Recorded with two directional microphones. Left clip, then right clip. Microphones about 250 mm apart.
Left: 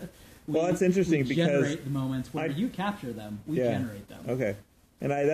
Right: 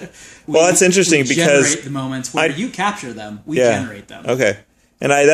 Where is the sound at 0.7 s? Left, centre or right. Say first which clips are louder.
Right 13 dB; right.